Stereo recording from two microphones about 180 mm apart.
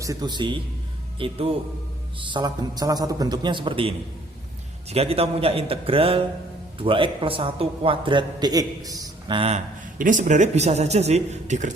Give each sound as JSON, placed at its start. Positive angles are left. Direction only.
{"t": 0.0, "sound": "a man's voice", "side_deg": -20}
{"t": 10.0, "sound": "a man's voice", "side_deg": -45}